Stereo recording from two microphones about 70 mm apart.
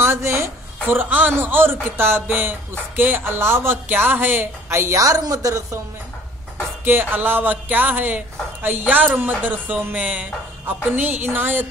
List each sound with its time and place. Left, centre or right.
0.0 s a sound: right
1.4 s speech: right
6.8 s music: right